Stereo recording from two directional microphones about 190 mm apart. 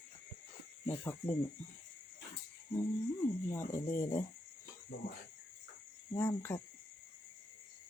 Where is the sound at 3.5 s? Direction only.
15° left (ahead or behind).